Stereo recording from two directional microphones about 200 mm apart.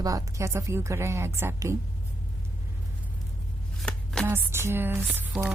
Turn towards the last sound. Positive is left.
turn(degrees=-10)  # may be behind; listen again after turning